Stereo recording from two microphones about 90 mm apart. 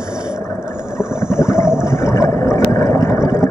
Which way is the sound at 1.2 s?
30° left (ahead or behind).